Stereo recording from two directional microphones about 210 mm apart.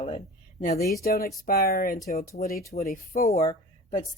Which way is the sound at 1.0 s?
45° left (ahead or behind).